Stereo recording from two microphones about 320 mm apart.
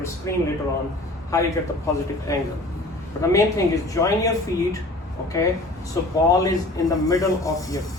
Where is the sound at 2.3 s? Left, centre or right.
Centre.